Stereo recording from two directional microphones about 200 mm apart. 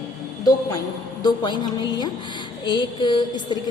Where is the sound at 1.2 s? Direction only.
20° left (ahead or behind).